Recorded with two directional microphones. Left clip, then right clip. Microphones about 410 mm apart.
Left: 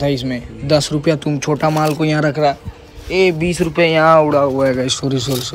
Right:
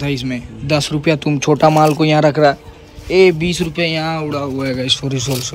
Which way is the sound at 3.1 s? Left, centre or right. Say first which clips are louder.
Right 3 dB; centre.